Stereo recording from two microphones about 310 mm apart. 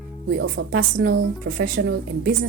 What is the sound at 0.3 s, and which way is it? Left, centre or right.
A woman's voice, right.